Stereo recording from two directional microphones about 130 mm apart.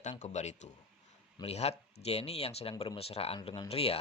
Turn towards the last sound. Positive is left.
turn(degrees=50)  # may be behind; listen again after turning